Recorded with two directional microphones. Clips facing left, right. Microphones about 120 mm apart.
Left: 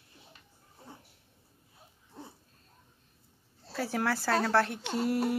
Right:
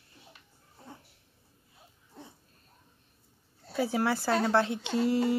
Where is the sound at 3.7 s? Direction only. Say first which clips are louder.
Right 3 dB; 10° right (ahead or behind).